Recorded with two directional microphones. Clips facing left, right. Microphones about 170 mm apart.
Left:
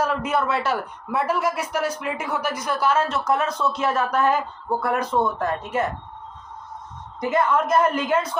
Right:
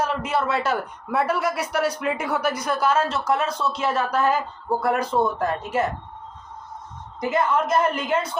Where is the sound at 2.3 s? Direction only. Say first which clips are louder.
Right 2 dB; 35° right (ahead or behind).